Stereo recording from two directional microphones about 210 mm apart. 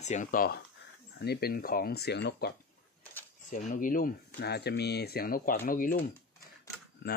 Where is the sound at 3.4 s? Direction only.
35° left (ahead or behind).